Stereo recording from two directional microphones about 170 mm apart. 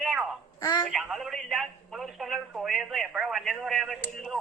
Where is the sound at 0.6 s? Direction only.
20° left (ahead or behind).